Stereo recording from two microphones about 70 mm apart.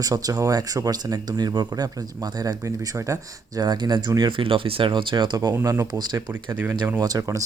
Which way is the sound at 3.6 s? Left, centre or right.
Right.